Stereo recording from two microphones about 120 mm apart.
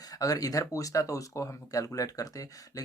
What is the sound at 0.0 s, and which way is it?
Speech, 30° left (ahead or behind).